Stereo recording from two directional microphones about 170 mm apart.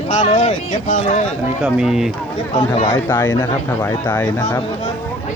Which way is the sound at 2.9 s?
15° left (ahead or behind).